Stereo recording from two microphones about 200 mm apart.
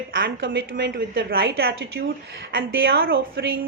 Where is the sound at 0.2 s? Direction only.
60° right (ahead or behind).